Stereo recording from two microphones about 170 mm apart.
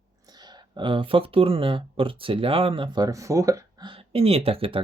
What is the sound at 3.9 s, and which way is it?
Speech, 35° right (ahead or behind).